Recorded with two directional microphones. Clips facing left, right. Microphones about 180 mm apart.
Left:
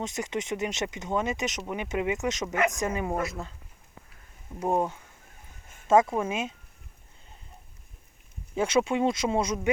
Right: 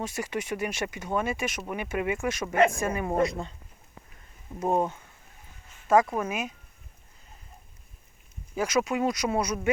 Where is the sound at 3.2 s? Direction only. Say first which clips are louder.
Right 6 dB; 5° left (ahead or behind).